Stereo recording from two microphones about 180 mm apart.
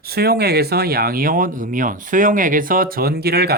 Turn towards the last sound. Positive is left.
turn(degrees=-60)  # may be behind; listen again after turning